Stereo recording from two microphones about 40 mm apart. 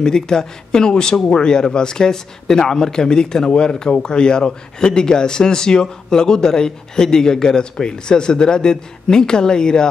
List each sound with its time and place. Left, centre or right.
0.0 s speech: centre